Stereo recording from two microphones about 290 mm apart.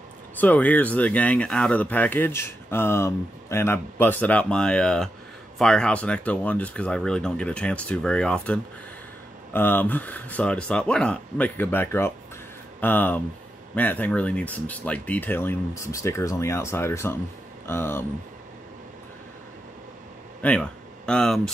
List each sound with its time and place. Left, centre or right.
0.4 s speech: centre
20.4 s speech: centre